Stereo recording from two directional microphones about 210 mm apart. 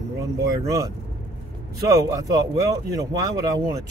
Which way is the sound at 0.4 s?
15° right (ahead or behind).